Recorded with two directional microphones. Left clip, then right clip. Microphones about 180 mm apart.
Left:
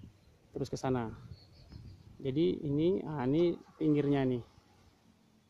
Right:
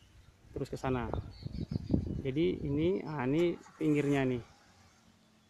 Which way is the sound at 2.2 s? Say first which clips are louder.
Left 3 dB; 10° left (ahead or behind).